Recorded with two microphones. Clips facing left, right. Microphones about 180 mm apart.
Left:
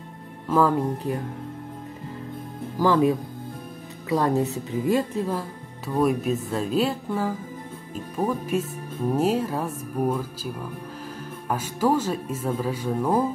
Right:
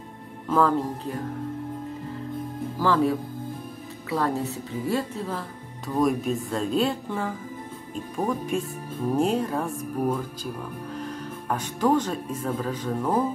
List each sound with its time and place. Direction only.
0.5 s a woman's voice: 10° left (ahead or behind)
2.8 s a woman's voice: 15° left (ahead or behind)
5.9 s speech: 5° left (ahead or behind)